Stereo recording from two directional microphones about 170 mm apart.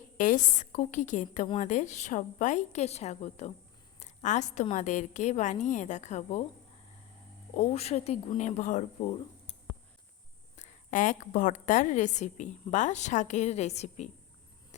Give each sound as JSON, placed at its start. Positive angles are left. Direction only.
{"t": 0.2, "sound": "a woman's voice", "side_deg": 50}
{"t": 7.5, "sound": "speech", "side_deg": 40}
{"t": 10.6, "sound": "a woman's voice", "side_deg": 45}